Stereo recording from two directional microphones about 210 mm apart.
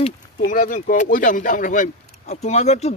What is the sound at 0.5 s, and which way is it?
A man's voice, 40° left (ahead or behind).